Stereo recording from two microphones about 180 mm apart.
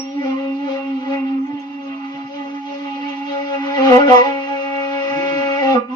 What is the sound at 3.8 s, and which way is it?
Wind instrument, 20° left (ahead or behind).